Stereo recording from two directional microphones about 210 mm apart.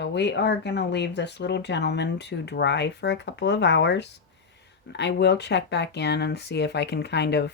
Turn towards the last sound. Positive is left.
turn(degrees=55)  # may be behind; listen again after turning